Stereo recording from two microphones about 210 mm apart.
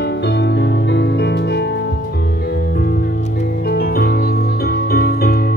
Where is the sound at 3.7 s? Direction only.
50° left (ahead or behind).